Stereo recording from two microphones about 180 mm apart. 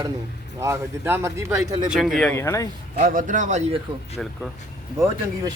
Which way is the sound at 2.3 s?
15° left (ahead or behind).